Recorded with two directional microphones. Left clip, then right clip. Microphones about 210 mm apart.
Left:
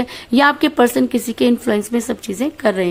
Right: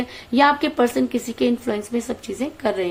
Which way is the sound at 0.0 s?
40° left (ahead or behind).